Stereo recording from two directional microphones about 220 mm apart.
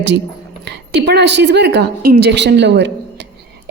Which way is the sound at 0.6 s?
50° right (ahead or behind).